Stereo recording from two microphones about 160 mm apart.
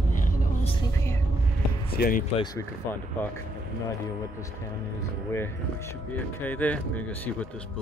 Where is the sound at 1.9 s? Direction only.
70° left (ahead or behind).